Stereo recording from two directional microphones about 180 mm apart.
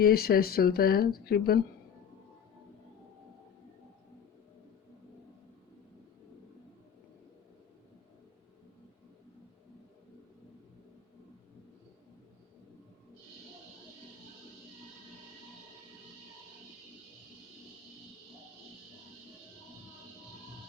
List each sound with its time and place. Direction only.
0.0 s speech: 60° left (ahead or behind)